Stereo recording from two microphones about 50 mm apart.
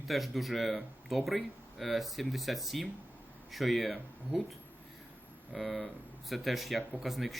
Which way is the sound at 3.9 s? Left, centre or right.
Right.